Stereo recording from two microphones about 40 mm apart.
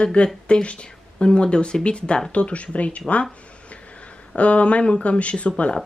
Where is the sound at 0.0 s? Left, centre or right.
Left.